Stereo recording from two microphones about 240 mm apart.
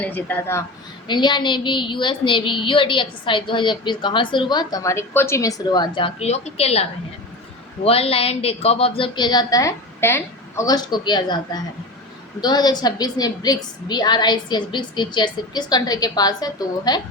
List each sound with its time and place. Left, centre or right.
0.0 s a woman's voice: centre; by 6.8 s left
7.9 s a woman's voice: left